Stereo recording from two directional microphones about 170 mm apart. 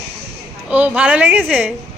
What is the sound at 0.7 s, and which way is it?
A woman's voice, 10° right (ahead or behind).